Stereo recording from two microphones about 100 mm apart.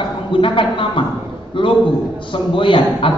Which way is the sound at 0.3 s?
60° left (ahead or behind).